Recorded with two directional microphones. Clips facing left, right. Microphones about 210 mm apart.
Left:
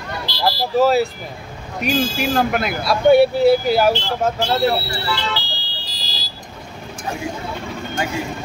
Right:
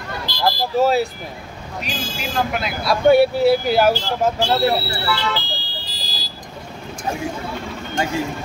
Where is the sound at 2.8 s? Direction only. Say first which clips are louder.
Left 1 dB; centre (ahead or behind).